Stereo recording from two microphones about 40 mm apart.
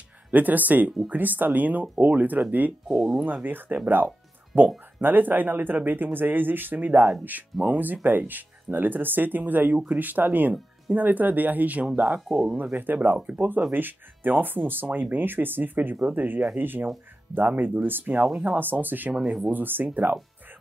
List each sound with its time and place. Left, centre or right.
0.3 s speech: right
2.9 s speech: centre
3.4 s speech: right
4.5 s speech: right
12.3 s speech: centre
12.7 s speech: right
19.1 s speech: centre
19.5 s speech: right